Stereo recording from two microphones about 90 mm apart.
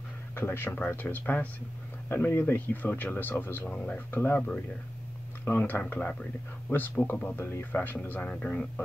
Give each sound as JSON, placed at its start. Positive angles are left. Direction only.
{"t": 0.4, "sound": "speech", "side_deg": 25}
{"t": 5.4, "sound": "speech", "side_deg": 20}
{"t": 7.3, "sound": "speech", "side_deg": 25}